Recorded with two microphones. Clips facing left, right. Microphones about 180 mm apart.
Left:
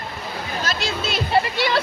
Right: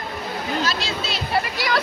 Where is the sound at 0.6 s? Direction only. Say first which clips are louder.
Even; 50° left (ahead or behind).